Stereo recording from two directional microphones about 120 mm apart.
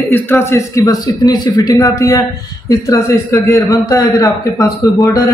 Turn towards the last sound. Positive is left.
turn(degrees=30)  # may be behind; listen again after turning